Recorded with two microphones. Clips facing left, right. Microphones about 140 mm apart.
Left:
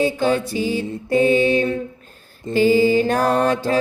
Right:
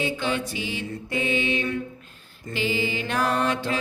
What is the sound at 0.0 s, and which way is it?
Music, 40° left (ahead or behind).